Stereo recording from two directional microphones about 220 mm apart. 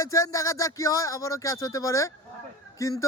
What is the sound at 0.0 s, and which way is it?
Speech, 15° left (ahead or behind).